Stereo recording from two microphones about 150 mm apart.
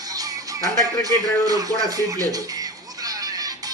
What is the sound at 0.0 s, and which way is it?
Music, 25° right (ahead or behind).